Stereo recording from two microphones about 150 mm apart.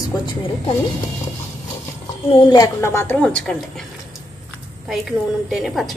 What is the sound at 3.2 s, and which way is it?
Speech, 5° left (ahead or behind).